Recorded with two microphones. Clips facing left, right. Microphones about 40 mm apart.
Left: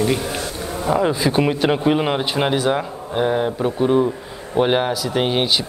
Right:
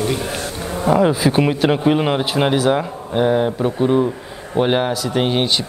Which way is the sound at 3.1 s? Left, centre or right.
Centre.